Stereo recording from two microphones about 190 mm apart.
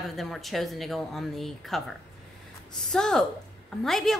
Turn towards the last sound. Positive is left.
turn(degrees=0)  # may be behind; listen again after turning